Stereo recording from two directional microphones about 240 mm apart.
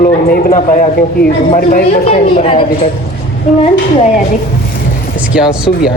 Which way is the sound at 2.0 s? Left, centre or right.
Left.